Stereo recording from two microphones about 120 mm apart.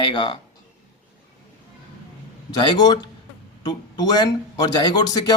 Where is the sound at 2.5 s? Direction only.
40° left (ahead or behind).